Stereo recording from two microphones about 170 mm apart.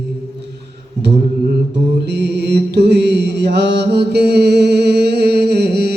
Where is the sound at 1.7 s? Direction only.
85° right.